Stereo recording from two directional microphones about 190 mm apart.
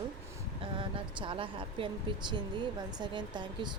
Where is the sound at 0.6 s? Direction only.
25° right (ahead or behind).